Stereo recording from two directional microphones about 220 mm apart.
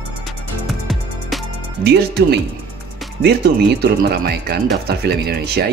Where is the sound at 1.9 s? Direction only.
50° right (ahead or behind).